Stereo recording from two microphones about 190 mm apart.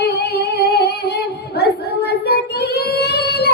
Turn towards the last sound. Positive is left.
turn(degrees=60)  # may be behind; listen again after turning